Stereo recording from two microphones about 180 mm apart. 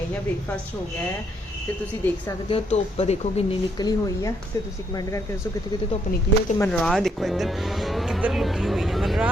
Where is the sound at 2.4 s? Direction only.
30° left (ahead or behind).